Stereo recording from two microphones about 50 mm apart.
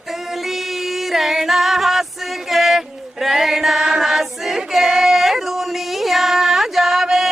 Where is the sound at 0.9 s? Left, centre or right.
Centre.